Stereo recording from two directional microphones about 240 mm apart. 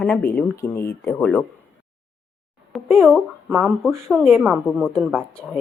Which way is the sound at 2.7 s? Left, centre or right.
Centre.